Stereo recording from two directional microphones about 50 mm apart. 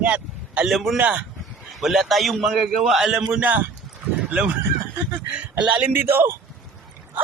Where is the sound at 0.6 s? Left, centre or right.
Centre.